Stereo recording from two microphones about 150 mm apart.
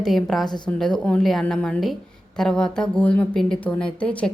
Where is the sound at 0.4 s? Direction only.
30° left (ahead or behind).